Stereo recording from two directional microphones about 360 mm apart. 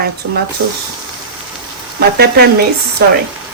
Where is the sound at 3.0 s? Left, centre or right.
Right.